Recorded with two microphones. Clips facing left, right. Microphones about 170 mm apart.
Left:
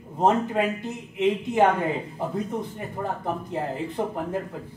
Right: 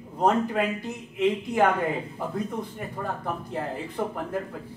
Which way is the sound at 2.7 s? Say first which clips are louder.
Left 2 dB; 20° left (ahead or behind).